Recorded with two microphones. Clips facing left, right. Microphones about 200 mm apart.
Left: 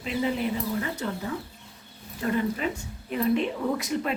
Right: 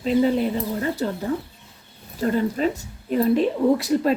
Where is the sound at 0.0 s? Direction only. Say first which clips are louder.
Right 8 dB; 35° right (ahead or behind).